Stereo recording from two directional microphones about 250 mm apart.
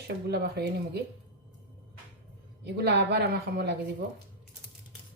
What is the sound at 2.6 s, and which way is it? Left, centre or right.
Speech, right.